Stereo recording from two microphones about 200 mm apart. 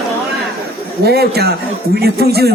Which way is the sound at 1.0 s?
50° right (ahead or behind).